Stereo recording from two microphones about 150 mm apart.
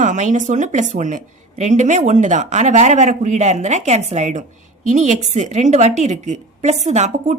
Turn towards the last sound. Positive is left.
turn(degrees=-50)  # may be behind; listen again after turning